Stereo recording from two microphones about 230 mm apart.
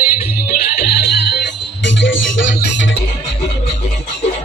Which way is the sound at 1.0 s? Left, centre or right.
Left.